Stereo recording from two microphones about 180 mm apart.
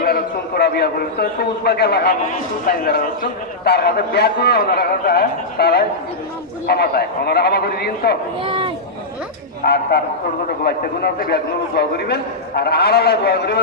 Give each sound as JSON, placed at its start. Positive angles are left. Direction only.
{"t": 0.0, "sound": "a man's voice", "side_deg": 60}
{"t": 2.2, "sound": "a man's voice", "side_deg": 55}
{"t": 8.4, "sound": "speech", "side_deg": -30}
{"t": 9.6, "sound": "a man's voice", "side_deg": 60}